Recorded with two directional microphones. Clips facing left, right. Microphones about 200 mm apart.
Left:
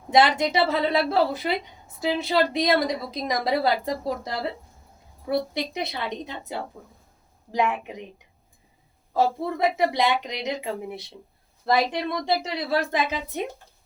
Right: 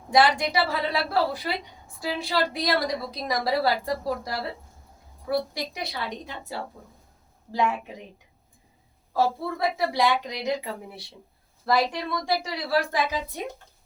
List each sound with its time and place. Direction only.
0.1 s a woman's voice: 20° left (ahead or behind)
9.1 s a woman's voice: 20° left (ahead or behind)